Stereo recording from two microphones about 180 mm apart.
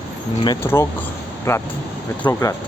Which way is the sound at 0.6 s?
20° left (ahead or behind).